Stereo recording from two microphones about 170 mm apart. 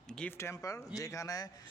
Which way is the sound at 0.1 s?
5° left (ahead or behind).